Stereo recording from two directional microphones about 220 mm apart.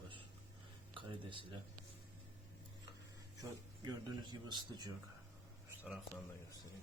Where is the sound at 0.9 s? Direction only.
25° right (ahead or behind).